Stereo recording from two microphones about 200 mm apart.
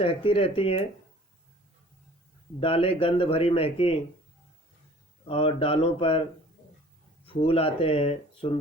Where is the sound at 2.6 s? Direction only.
30° left (ahead or behind).